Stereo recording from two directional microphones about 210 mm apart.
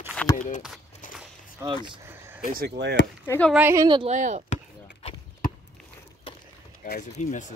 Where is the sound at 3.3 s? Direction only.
5° left (ahead or behind).